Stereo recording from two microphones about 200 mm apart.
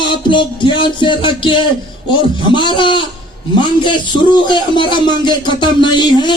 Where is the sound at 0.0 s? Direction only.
25° left (ahead or behind).